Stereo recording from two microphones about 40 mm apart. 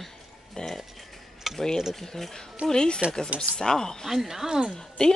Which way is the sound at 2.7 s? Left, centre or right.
Centre.